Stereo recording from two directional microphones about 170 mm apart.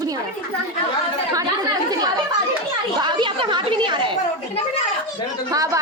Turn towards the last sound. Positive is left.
turn(degrees=-20)  # may be behind; listen again after turning